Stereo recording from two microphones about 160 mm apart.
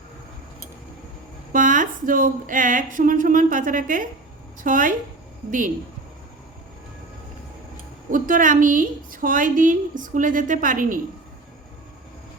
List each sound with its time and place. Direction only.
1.5 s a woman's voice: 55° right (ahead or behind)
8.1 s a woman's voice: 55° right (ahead or behind)